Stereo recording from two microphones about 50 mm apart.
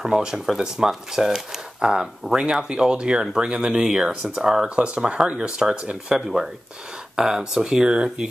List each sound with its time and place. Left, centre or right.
0.0 s speech: centre
4.6 s speech: right